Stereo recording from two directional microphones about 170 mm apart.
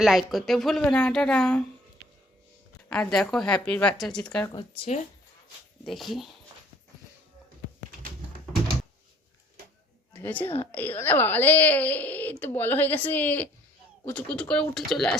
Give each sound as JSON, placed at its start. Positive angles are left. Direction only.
{"t": 0.0, "sound": "a woman's voice", "side_deg": 0}
{"t": 2.9, "sound": "a woman's voice", "side_deg": 5}
{"t": 4.4, "sound": "speech", "side_deg": 25}
{"t": 5.8, "sound": "a woman's voice", "side_deg": 0}
{"t": 10.1, "sound": "a woman's voice", "side_deg": 10}